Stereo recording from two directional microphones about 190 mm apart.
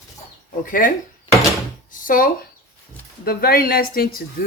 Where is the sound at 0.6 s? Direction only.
45° left (ahead or behind).